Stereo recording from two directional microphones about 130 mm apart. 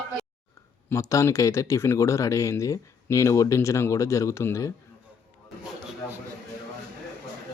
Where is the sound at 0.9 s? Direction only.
25° left (ahead or behind).